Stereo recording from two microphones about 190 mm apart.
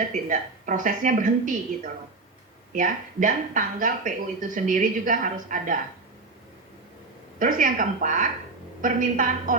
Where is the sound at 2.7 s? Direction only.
45° right (ahead or behind).